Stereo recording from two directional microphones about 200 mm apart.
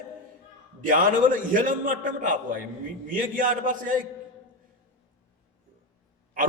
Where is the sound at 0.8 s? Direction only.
40° right (ahead or behind).